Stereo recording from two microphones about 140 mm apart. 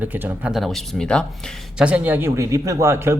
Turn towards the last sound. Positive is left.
turn(degrees=-20)  # may be behind; listen again after turning